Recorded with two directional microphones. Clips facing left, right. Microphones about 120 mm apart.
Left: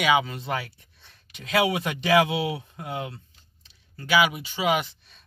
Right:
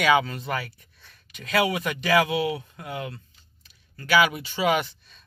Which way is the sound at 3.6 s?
25° left (ahead or behind).